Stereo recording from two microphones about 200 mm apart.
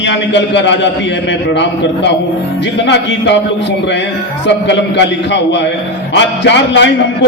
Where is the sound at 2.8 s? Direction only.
60° left (ahead or behind).